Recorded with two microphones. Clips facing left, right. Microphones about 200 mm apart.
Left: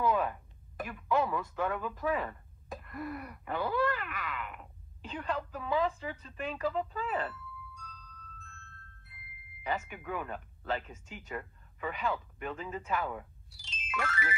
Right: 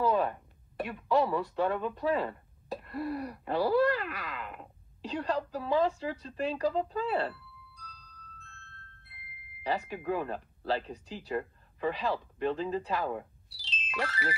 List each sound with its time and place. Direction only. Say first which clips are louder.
0.0 s speech: right 2 dB; 35° right (ahead or behind)
13.8 s music: right 2 dB; 35° right (ahead or behind)